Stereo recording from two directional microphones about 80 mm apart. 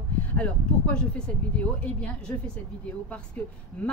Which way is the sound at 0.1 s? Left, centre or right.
Left.